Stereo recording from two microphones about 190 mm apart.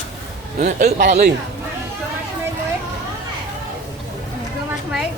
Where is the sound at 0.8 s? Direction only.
55° right (ahead or behind).